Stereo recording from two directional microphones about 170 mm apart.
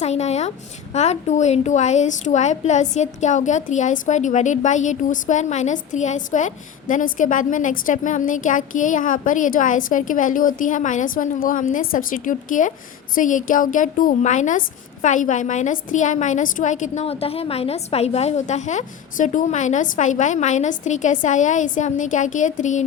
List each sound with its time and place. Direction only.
0.0 s a woman's voice: 40° left (ahead or behind)